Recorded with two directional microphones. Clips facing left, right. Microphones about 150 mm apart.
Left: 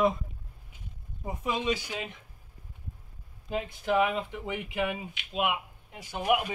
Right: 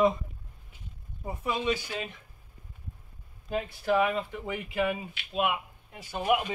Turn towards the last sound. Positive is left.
turn(degrees=10)  # may be behind; listen again after turning